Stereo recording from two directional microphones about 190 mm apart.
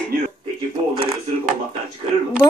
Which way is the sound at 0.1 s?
50° right (ahead or behind).